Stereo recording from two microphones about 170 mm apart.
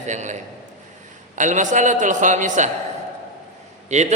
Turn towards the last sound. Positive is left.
turn(degrees=-40)  # may be behind; listen again after turning